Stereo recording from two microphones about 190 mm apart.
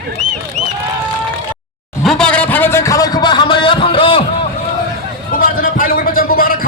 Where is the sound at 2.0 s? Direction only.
Centre (ahead or behind); by 4.2 s 25° left (ahead or behind).